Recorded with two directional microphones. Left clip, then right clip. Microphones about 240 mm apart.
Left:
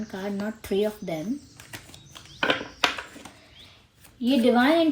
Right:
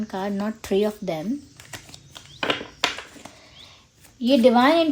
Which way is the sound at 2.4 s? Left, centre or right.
Centre.